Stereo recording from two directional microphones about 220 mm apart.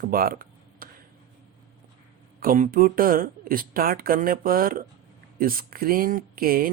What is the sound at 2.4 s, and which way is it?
Speech, 40° right (ahead or behind).